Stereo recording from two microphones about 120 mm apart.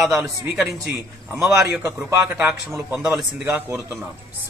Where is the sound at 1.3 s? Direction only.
5° right (ahead or behind).